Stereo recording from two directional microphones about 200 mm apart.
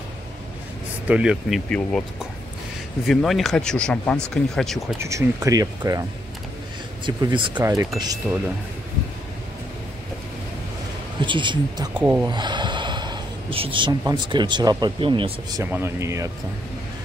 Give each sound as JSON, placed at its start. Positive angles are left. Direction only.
{"t": 1.0, "sound": "speech", "side_deg": -5}
{"t": 4.9, "sound": "speech", "side_deg": -15}
{"t": 7.1, "sound": "speech", "side_deg": -20}
{"t": 11.1, "sound": "speech", "side_deg": -25}
{"t": 15.6, "sound": "speech", "side_deg": -10}